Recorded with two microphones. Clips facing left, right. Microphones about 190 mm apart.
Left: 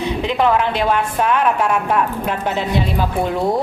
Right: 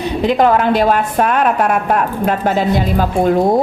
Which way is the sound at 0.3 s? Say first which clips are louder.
Right 5 dB; 40° right (ahead or behind).